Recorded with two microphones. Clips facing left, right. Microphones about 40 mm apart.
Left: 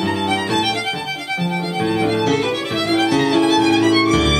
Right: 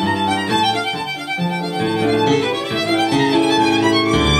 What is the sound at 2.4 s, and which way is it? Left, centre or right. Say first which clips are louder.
Music: right 1 dB; centre.